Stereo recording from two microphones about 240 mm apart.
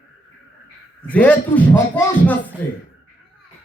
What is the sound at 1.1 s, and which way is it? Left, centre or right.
A man's voice, centre.